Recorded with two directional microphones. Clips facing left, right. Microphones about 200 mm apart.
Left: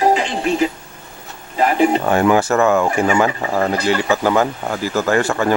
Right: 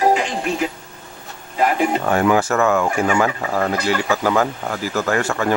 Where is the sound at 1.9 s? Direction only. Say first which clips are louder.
Left 2 dB; 30° left (ahead or behind).